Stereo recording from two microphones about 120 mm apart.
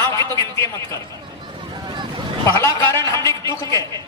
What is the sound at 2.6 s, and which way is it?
A man's voice, 25° left (ahead or behind).